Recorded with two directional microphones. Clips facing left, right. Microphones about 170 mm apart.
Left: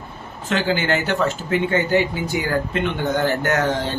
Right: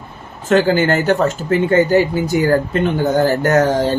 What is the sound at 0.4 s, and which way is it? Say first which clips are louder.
Speech: right 8 dB; 45° right (ahead or behind).